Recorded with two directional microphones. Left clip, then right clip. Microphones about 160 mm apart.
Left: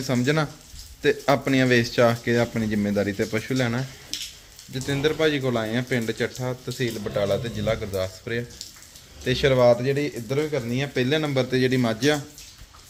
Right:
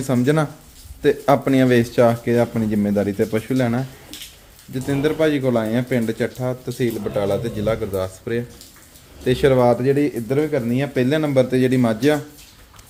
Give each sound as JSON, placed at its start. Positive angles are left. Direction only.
{"t": 0.0, "sound": "speech", "side_deg": -15}